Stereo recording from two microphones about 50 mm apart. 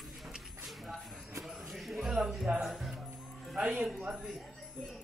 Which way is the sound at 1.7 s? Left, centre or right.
Centre.